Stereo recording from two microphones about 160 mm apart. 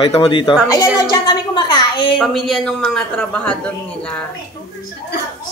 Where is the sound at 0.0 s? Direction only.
35° left (ahead or behind).